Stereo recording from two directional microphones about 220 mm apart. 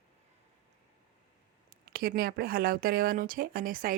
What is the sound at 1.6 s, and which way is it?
Speech, 40° right (ahead or behind).